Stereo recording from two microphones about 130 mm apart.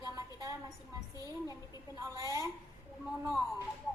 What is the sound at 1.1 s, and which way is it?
Speech, 30° left (ahead or behind).